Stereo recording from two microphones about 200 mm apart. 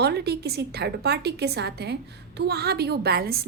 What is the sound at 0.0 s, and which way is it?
A woman's voice, 55° right (ahead or behind).